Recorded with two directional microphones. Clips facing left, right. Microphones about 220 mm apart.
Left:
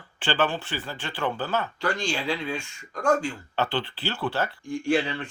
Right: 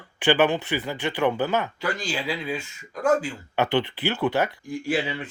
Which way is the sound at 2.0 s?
5° right (ahead or behind).